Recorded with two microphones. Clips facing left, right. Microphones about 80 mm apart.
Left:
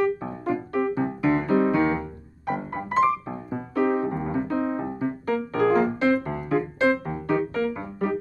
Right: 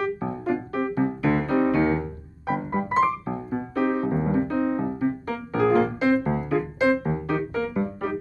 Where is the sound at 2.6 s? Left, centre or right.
Right.